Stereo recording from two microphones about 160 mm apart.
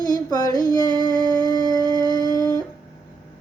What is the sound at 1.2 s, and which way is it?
Music, 25° left (ahead or behind).